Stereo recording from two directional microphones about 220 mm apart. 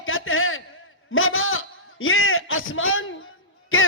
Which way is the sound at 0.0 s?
65° left (ahead or behind).